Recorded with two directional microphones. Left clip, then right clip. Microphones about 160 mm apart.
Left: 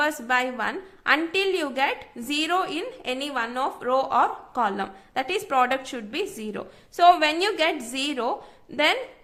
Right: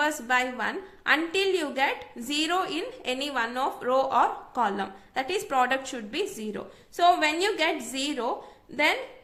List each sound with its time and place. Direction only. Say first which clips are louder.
0.0 s a woman's voice: left 2 dB; 25° left (ahead or behind)